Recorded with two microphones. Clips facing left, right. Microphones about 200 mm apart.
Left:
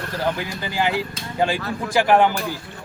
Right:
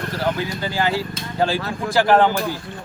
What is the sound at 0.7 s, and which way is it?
Speech, 15° left (ahead or behind).